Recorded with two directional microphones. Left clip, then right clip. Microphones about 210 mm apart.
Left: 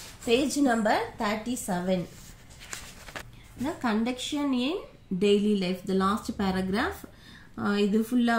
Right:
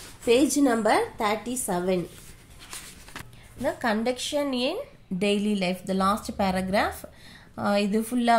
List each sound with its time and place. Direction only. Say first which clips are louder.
0.3 s a woman's voice: right 3 dB; 35° right (ahead or behind)
3.6 s a woman's voice: right 4 dB; 40° right (ahead or behind)